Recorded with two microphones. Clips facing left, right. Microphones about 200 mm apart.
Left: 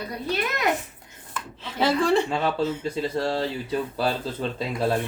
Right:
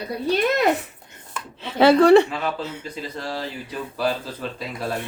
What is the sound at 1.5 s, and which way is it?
Speech, 65° right (ahead or behind).